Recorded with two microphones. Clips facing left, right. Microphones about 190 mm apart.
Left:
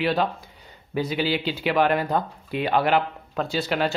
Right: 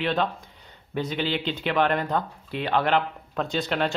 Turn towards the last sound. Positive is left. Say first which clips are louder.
# left 1 dB
turn(degrees=5)  # may be behind; listen again after turning